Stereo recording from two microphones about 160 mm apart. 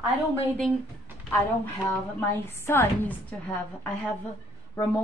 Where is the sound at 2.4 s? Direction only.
15° left (ahead or behind).